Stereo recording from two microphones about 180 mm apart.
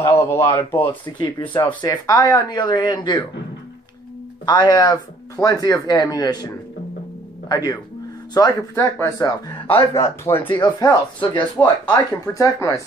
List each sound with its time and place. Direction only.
0.0 s a man's voice: 15° left (ahead or behind)
0.8 s speech: 25° left (ahead or behind)
4.5 s speech: 20° left (ahead or behind)